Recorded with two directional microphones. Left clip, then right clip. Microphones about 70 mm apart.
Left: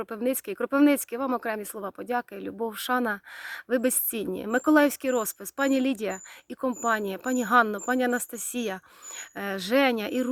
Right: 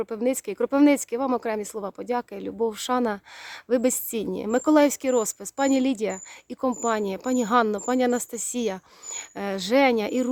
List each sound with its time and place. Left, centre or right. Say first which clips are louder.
0.2 s a woman's voice: right 2 dB; right